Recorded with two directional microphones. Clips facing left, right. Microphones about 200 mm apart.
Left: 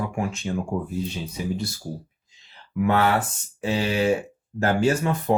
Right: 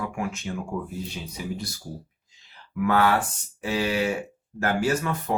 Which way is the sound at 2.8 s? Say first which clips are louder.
Left 1 dB; 25° left (ahead or behind).